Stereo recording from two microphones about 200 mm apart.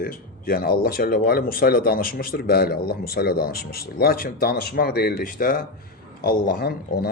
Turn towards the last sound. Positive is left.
turn(degrees=50)  # may be behind; listen again after turning